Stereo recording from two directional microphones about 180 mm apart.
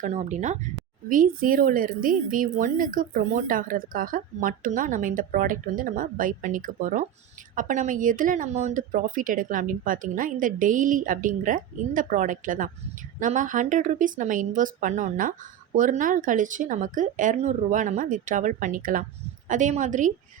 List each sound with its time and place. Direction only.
0.0 s speech: 40° right (ahead or behind)